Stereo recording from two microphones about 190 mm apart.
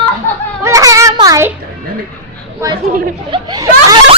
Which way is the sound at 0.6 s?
15° right (ahead or behind).